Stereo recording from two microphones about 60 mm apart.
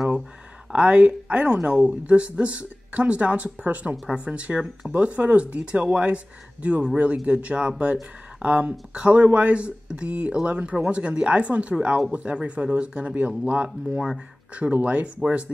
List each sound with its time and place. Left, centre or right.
0.7 s speech: centre